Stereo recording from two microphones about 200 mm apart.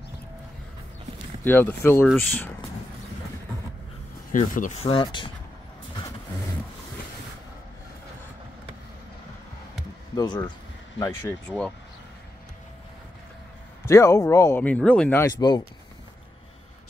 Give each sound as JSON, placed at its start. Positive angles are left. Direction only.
{"t": 1.4, "sound": "speech", "side_deg": 10}
{"t": 4.3, "sound": "speech", "side_deg": 40}
{"t": 10.1, "sound": "speech", "side_deg": 20}
{"t": 13.8, "sound": "speech", "side_deg": 15}